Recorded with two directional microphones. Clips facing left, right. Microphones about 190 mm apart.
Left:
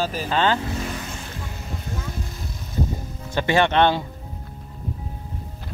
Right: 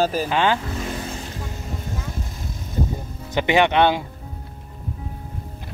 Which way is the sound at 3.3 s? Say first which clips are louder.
Right 2 dB; 15° right (ahead or behind).